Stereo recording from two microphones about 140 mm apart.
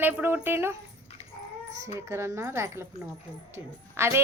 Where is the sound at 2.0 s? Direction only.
20° right (ahead or behind).